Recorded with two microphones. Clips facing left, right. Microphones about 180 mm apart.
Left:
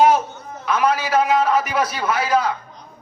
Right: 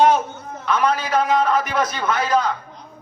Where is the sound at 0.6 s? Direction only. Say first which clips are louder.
Left 1 dB; 5° left (ahead or behind).